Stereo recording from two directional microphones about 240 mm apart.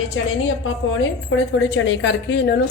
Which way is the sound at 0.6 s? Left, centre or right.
Left.